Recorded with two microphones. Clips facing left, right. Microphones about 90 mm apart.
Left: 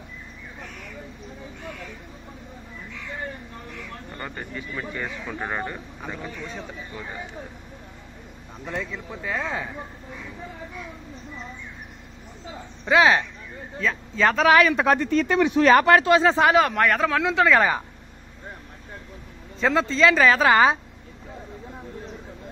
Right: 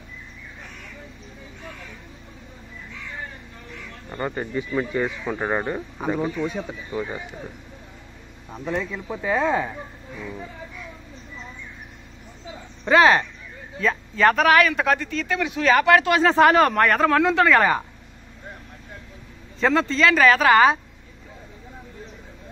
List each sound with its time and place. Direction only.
4.2 s speech: 20° right (ahead or behind)
8.6 s speech: 5° right (ahead or behind)
12.8 s speech: 5° left (ahead or behind)
14.7 s speech: 30° left (ahead or behind)
16.4 s speech: 5° left (ahead or behind)
19.6 s speech: 15° left (ahead or behind)